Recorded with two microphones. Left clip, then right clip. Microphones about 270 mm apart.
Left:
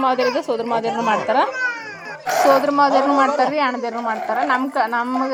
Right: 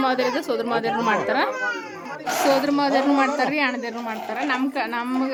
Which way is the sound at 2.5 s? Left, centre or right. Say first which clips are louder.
Left 5 dB; centre.